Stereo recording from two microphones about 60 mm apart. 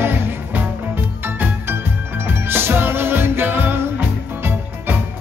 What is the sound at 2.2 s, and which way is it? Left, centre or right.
Music, right.